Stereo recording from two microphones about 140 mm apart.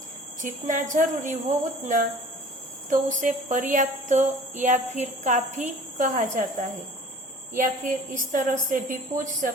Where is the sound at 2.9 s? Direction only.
65° right (ahead or behind).